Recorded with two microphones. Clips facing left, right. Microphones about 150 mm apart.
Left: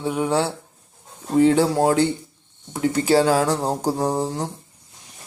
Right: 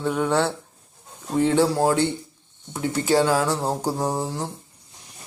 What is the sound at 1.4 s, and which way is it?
Speech, 40° left (ahead or behind).